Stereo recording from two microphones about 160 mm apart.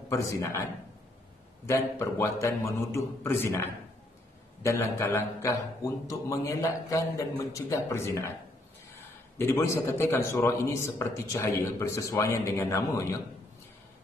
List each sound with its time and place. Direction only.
0.1 s a man's voice: 20° left (ahead or behind)
1.7 s a man's voice: 15° left (ahead or behind)
4.6 s a man's voice: 15° left (ahead or behind)
9.4 s a man's voice: 15° left (ahead or behind)